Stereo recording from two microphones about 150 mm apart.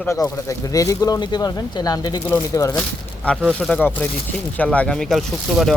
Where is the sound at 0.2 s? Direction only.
25° left (ahead or behind).